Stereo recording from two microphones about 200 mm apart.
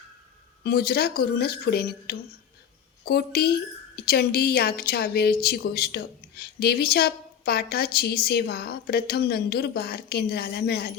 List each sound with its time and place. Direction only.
0.6 s a woman's voice: 50° left (ahead or behind)